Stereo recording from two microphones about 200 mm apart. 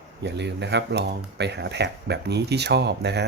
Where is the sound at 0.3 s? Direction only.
60° right (ahead or behind).